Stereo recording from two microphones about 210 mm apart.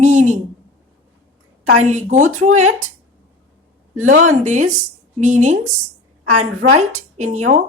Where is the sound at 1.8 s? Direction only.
35° right (ahead or behind).